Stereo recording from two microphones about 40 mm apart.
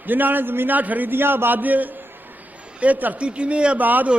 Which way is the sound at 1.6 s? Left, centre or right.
Right.